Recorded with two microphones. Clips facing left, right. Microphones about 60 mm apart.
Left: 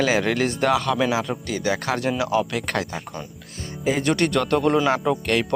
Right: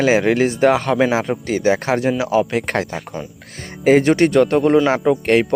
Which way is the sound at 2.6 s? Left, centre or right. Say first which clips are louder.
Right 5 dB; right.